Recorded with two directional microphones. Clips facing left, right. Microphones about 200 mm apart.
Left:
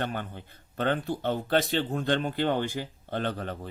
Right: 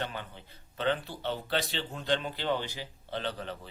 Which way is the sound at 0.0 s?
50° left (ahead or behind).